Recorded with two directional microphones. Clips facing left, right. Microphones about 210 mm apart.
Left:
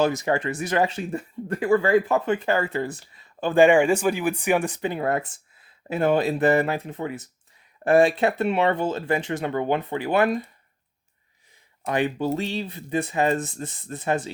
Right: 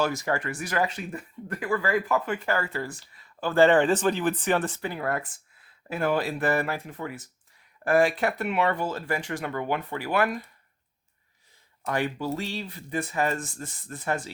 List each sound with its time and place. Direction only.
0.0 s speech: 20° left (ahead or behind)
11.9 s speech: 20° left (ahead or behind)